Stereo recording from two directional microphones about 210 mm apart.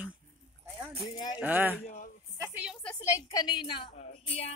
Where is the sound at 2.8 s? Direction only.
10° left (ahead or behind).